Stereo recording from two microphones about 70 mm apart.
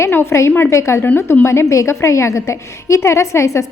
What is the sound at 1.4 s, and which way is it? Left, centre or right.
A woman's voice, left.